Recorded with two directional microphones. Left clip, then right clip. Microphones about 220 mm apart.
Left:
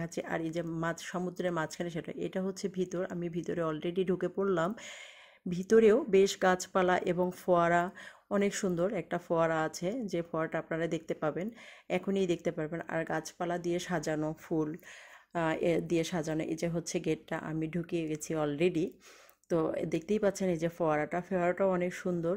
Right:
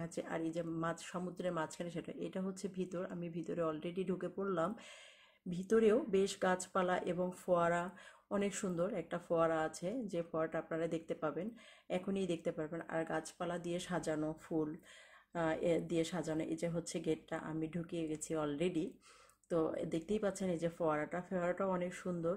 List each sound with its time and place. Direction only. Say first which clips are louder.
0.0 s speech: left 5 dB; 40° left (ahead or behind)